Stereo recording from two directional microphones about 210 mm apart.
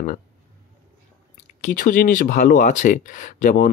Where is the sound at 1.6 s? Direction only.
40° left (ahead or behind).